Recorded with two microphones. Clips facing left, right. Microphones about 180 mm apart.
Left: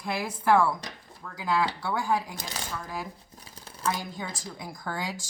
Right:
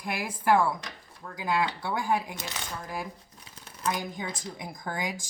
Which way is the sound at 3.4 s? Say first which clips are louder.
Left 1 dB; 35° left (ahead or behind).